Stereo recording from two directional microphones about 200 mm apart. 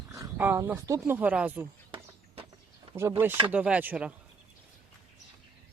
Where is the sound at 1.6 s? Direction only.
15° right (ahead or behind).